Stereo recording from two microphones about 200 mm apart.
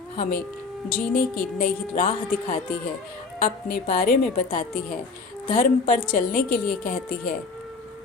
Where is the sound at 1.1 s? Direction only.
45° left (ahead or behind).